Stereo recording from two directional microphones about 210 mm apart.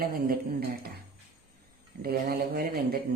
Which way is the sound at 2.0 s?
45° right (ahead or behind).